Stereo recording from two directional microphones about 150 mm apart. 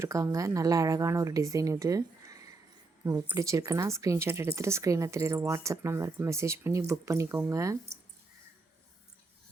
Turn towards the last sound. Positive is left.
turn(degrees=-20)  # may be behind; listen again after turning